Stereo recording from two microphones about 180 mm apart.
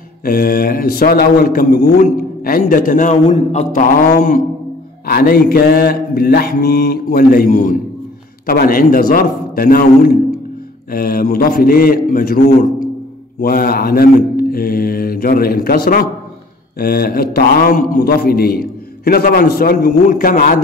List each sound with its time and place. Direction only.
0.2 s a man's voice: 55° left (ahead or behind)